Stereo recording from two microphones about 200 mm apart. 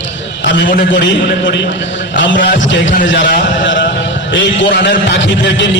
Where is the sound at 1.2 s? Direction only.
60° left (ahead or behind).